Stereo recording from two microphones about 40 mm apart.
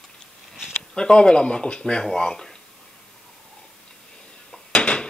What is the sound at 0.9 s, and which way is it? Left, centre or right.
Speech, left.